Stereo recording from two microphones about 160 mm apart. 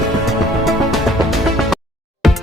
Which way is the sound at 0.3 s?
Centre (ahead or behind).